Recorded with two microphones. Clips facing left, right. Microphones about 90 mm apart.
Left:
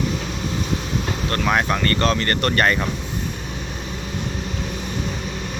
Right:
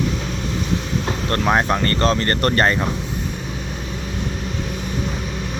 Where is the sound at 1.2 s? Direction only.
30° right (ahead or behind).